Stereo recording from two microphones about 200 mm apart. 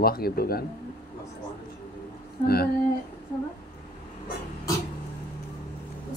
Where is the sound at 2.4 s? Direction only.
50° left (ahead or behind).